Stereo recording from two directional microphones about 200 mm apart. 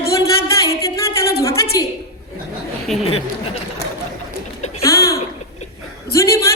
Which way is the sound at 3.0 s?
30° left (ahead or behind).